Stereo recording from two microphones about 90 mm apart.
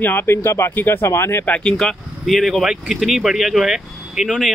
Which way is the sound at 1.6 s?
5° left (ahead or behind).